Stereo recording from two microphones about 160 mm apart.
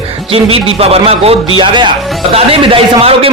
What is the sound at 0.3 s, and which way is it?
A man's voice, 35° right (ahead or behind).